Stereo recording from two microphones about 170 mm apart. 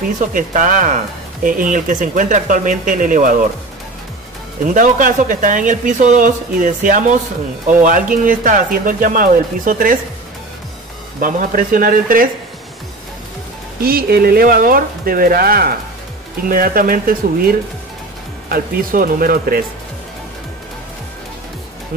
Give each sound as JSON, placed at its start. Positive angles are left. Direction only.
{"t": 0.2, "sound": "speech", "side_deg": -50}
{"t": 4.6, "sound": "speech", "side_deg": -50}
{"t": 11.1, "sound": "speech", "side_deg": -55}
{"t": 13.7, "sound": "speech", "side_deg": -60}